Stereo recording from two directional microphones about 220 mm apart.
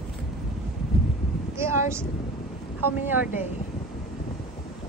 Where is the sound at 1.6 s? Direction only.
10° right (ahead or behind).